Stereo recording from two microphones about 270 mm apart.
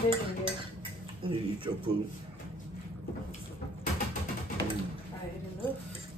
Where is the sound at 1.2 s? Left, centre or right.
Centre.